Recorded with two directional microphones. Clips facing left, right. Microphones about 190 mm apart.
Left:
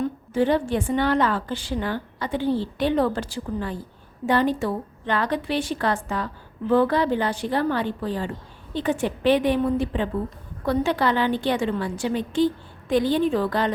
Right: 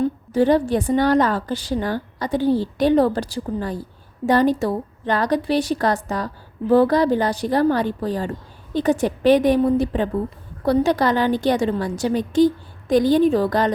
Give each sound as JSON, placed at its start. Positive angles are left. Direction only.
{"t": 0.0, "sound": "a woman's voice", "side_deg": -40}